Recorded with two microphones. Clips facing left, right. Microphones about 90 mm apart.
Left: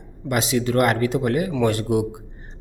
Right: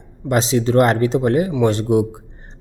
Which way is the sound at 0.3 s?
30° right (ahead or behind).